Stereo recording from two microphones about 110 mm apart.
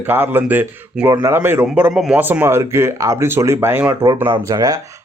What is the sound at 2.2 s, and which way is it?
Speech, 15° right (ahead or behind).